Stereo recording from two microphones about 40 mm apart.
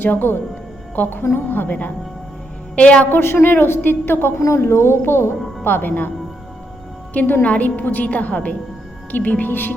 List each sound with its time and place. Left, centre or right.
0.0 s a woman's voice: left
1.2 s a woman's voice: left
1.5 s a woman's voice: left
2.7 s a woman's voice: left
3.1 s a woman's voice: left
5.6 s a woman's voice: left
7.1 s a woman's voice: left